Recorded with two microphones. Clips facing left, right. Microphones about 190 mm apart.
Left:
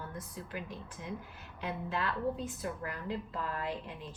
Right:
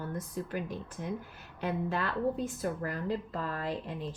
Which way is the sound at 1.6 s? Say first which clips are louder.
Right 4 dB; 45° right (ahead or behind).